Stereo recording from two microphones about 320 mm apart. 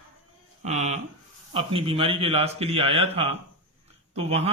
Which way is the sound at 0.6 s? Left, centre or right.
Right.